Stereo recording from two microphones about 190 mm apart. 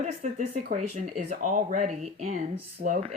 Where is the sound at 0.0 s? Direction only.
35° right (ahead or behind).